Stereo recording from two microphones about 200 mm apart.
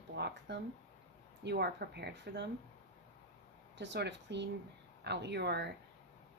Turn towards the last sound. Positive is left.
turn(degrees=-55)  # may be behind; listen again after turning